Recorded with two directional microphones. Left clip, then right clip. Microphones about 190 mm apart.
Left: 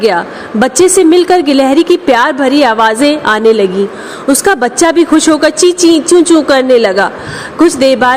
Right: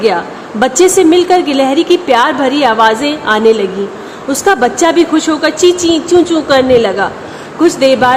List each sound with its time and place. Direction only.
0.6 s a woman's voice: 25° left (ahead or behind)